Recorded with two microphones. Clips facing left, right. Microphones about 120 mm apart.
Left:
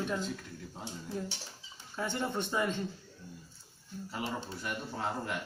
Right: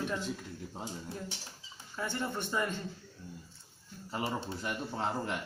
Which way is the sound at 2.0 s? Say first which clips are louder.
Left 2 dB; 15° left (ahead or behind).